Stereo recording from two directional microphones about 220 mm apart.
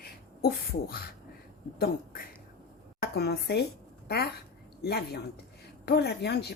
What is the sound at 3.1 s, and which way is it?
Speech, 50° left (ahead or behind).